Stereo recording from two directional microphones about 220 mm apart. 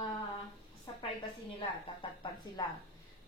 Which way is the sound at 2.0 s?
25° left (ahead or behind).